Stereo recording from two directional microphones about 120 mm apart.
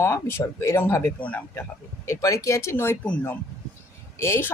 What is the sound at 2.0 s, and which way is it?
Speech, 25° left (ahead or behind).